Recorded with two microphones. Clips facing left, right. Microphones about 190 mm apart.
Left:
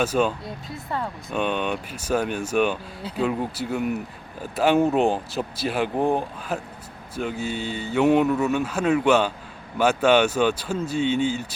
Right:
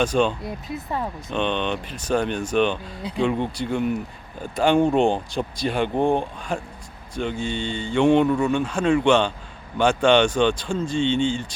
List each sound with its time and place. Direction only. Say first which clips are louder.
0.0 s speech: right 1 dB; 5° left (ahead or behind)
0.9 s speech: even; 15° right (ahead or behind)
1.3 s speech: right 1 dB; 5° left (ahead or behind)